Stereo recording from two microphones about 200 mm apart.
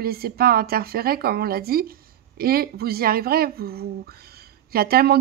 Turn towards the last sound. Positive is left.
turn(degrees=-50)  # may be behind; listen again after turning